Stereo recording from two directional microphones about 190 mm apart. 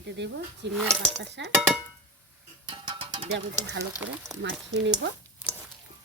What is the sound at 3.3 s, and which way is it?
Speech, 65° right (ahead or behind).